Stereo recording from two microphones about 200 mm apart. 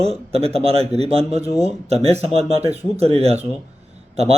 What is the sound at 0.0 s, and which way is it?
Speech, 30° right (ahead or behind).